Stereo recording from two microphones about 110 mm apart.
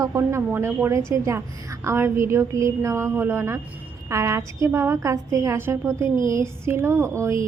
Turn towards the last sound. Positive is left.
turn(degrees=-25)  # may be behind; listen again after turning